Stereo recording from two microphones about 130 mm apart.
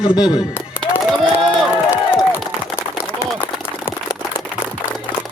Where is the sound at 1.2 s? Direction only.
Centre (ahead or behind).